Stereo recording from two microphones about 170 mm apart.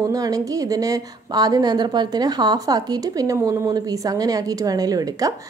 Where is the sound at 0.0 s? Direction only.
20° right (ahead or behind).